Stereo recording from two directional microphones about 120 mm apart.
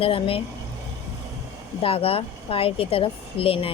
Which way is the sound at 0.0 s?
50° left (ahead or behind).